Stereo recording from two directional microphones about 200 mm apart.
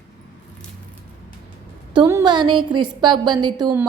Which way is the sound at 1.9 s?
20° right (ahead or behind).